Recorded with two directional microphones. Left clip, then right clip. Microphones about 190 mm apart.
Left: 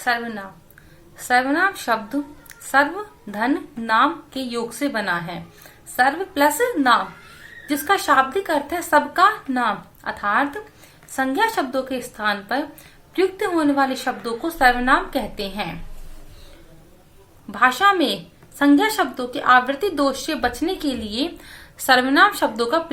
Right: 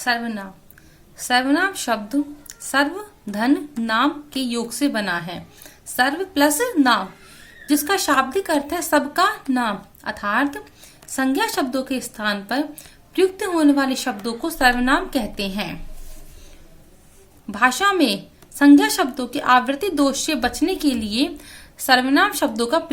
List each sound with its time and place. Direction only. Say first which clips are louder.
0.0 s speech: even; 50° right (ahead or behind)
17.5 s a woman's voice: left 2 dB; 45° right (ahead or behind)